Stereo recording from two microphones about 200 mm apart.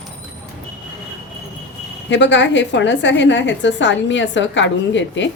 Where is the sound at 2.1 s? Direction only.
65° left (ahead or behind).